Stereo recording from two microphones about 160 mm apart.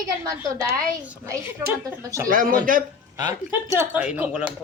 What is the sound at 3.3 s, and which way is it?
Speech, 20° right (ahead or behind).